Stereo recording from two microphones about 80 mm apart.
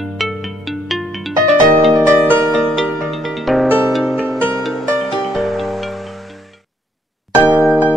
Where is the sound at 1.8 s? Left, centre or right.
Centre.